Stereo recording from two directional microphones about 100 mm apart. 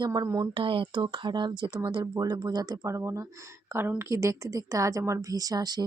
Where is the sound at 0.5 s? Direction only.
60° right (ahead or behind).